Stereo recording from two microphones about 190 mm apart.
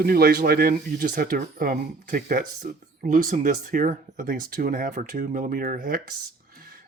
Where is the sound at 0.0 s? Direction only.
55° right (ahead or behind).